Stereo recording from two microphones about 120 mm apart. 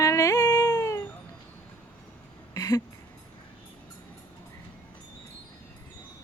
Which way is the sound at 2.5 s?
30° left (ahead or behind).